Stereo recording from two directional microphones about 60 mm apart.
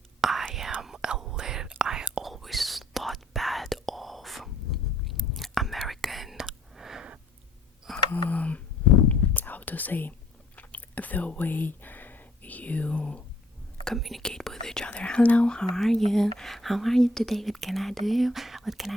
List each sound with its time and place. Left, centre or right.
0.2 s whispering: centre
2.2 s whispering: centre
6.7 s a sound: centre
8.3 s a sound: left
9.3 s whispering: left
13.8 s speech: centre
14.3 s whispering: centre
14.8 s speech: centre